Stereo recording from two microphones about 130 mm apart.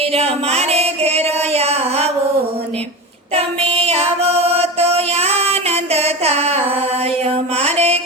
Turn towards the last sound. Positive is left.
turn(degrees=-55)  # may be behind; listen again after turning